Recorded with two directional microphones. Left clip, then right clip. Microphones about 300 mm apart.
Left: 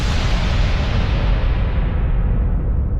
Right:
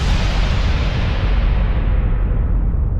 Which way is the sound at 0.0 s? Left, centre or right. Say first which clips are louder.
Even; centre.